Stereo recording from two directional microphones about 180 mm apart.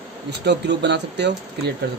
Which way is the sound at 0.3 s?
70° right (ahead or behind).